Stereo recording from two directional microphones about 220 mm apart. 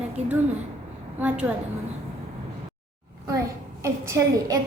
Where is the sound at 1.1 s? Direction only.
5° right (ahead or behind).